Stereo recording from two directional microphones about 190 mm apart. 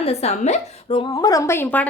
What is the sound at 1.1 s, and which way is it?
Speech, 20° left (ahead or behind).